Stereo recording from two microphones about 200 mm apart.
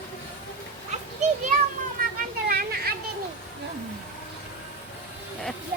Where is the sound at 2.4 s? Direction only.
50° right (ahead or behind).